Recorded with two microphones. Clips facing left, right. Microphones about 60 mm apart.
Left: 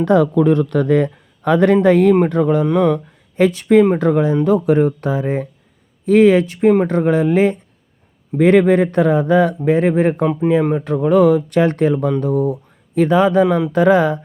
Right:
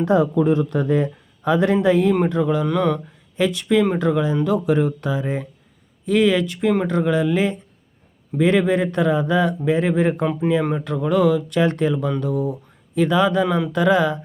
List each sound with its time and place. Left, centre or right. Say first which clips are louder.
0.0 s a man's voice: left 4 dB; left
2.6 s speech: left 5 dB; centre
3.3 s speech: left 6 dB; left
10.6 s speech: left 5 dB; centre
10.8 s speech: left 6 dB; left